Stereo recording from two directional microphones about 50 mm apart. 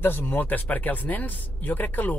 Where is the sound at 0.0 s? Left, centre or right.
Left.